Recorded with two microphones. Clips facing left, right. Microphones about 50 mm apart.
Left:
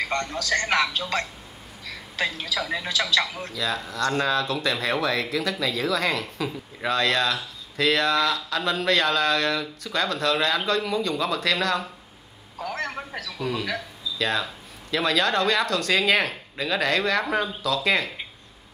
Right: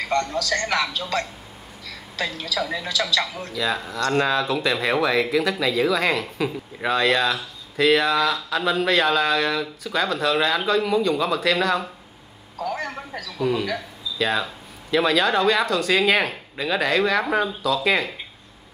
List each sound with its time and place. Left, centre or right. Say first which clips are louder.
0.1 s a man's voice: right 3 dB; centre
1.9 s a woman's voice: left 1 dB; centre
3.2 s speech: even; centre
3.5 s speech: right 3 dB; centre
12.5 s a sound: right 2 dB; centre
13.4 s speech: right 5 dB; centre